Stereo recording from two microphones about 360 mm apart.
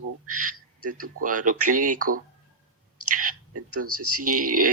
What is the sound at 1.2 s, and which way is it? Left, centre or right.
Speech, right.